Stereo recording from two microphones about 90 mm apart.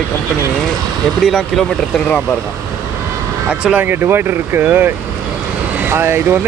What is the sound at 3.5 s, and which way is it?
Speech, 15° right (ahead or behind).